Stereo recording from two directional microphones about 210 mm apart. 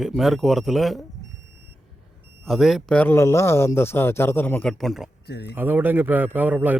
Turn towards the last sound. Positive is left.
turn(degrees=-10)  # may be behind; listen again after turning